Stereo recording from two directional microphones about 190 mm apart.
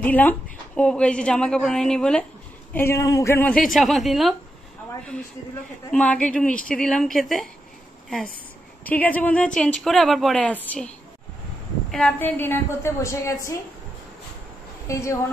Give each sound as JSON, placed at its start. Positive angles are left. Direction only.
{"t": 0.0, "sound": "a woman's voice", "side_deg": 10}
{"t": 5.9, "sound": "a woman's voice", "side_deg": 5}
{"t": 8.8, "sound": "a woman's voice", "side_deg": 10}
{"t": 11.9, "sound": "a woman's voice", "side_deg": 5}
{"t": 14.9, "sound": "a woman's voice", "side_deg": 15}